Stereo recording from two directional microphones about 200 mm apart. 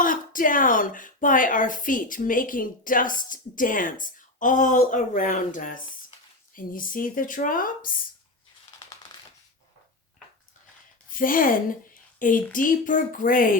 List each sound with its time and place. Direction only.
0.0 s speech: 40° left (ahead or behind)
11.1 s speech: 45° left (ahead or behind)